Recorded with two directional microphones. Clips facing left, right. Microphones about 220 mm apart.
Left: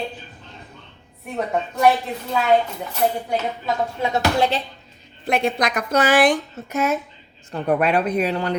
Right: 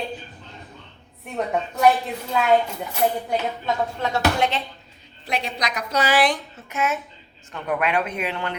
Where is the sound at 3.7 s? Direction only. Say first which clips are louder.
Left 1 dB; centre (ahead or behind).